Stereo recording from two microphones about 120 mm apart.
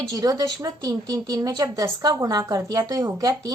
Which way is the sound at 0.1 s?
30° right (ahead or behind).